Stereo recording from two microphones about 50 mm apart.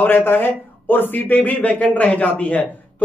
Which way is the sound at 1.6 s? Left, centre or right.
Left.